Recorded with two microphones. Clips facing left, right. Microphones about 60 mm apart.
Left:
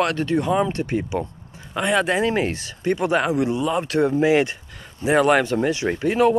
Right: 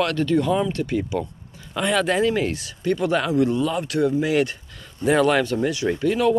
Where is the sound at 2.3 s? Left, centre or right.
Left.